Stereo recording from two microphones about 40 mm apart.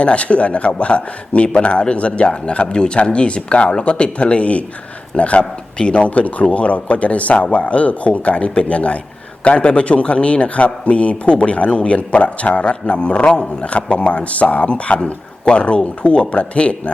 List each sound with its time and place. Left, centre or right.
0.0 s a man's voice: left